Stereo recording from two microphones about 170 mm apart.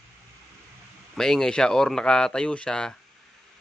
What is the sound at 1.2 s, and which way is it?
A man's voice, 5° left (ahead or behind).